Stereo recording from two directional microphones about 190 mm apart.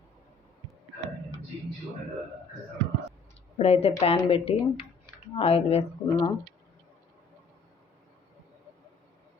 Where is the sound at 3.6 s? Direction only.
35° left (ahead or behind).